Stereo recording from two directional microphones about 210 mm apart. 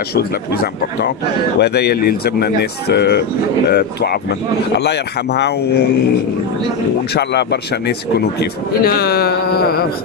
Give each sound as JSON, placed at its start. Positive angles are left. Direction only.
{"t": 0.1, "sound": "speech", "side_deg": 50}
{"t": 7.2, "sound": "speech", "side_deg": 50}